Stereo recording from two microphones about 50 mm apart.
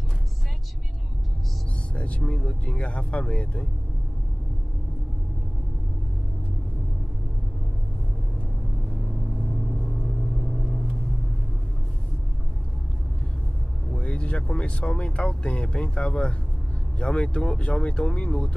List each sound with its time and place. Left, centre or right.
2.0 s speech: left
13.9 s speech: left